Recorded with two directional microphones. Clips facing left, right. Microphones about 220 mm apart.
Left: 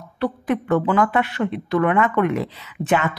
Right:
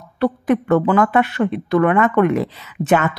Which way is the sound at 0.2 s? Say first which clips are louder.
Right 5 dB; 45° right (ahead or behind).